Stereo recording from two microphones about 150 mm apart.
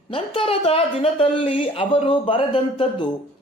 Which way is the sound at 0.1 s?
35° left (ahead or behind).